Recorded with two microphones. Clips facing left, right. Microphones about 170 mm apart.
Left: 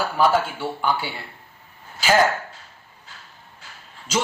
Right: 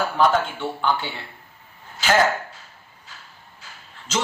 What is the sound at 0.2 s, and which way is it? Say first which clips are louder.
Speech: left 1 dB; 10° left (ahead or behind).